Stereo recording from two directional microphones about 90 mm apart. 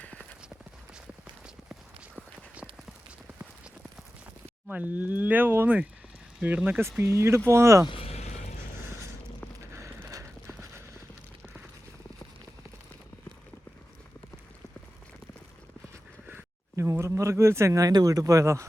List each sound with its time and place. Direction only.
0.0 s clip-clop: 15° left (ahead or behind)
4.7 s speech: 20° right (ahead or behind)
7.9 s vehicle: 90° left
9.7 s a sound: 35° right (ahead or behind)
16.7 s speech: 30° right (ahead or behind)